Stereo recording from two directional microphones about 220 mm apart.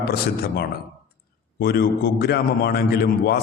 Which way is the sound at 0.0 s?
45° left (ahead or behind).